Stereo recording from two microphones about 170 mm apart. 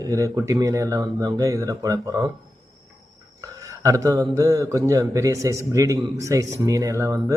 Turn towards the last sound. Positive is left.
turn(degrees=-20)  # may be behind; listen again after turning